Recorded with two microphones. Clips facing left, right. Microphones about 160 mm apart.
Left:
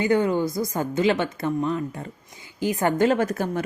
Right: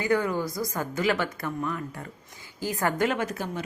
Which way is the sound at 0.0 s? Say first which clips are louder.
Left 5 dB; 25° left (ahead or behind).